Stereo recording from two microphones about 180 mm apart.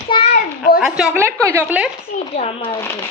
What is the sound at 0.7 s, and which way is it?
A woman's voice, 5° right (ahead or behind).